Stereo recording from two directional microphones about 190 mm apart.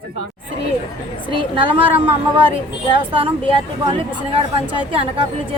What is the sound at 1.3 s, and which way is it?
Speech, 25° right (ahead or behind).